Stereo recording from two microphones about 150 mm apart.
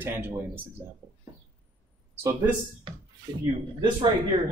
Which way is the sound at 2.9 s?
35° right (ahead or behind).